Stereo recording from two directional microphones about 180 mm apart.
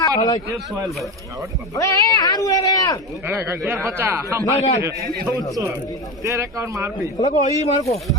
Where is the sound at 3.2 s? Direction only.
15° right (ahead or behind).